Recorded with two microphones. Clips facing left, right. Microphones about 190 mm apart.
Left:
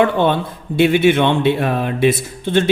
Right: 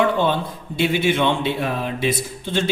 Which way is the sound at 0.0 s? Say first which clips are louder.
Left 4 dB; 60° left (ahead or behind).